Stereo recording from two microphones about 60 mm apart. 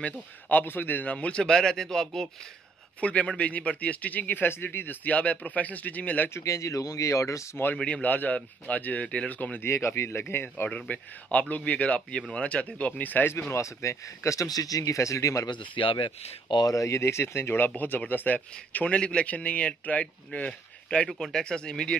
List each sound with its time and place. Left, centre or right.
0.0 s a man's voice: left
1.1 s speech: centre
1.5 s speech: centre
3.0 s a man's voice: left
6.3 s speech: left
7.7 s a man's voice: left
9.7 s a man's voice: left
13.3 s speech: left
16.6 s speech: left
17.6 s a man's voice: left
21.1 s speech: centre